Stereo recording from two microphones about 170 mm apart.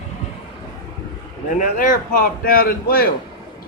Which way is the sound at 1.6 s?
50° left (ahead or behind).